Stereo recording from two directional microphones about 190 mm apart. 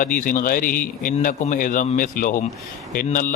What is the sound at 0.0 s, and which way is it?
A man's voice, 45° left (ahead or behind).